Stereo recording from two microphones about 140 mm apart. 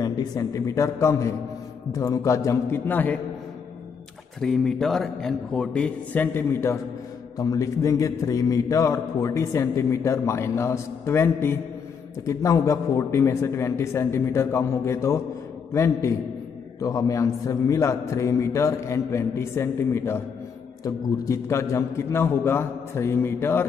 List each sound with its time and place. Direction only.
0.0 s a man's voice: 25° left (ahead or behind)
4.4 s a man's voice: 5° left (ahead or behind)